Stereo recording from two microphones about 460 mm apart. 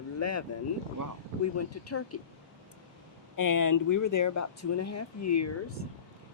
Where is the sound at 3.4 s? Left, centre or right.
Left.